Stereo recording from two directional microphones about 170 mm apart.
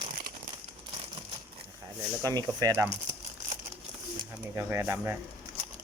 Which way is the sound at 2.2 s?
20° right (ahead or behind).